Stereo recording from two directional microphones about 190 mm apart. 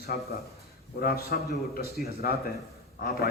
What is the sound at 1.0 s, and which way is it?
A man's voice, 55° left (ahead or behind).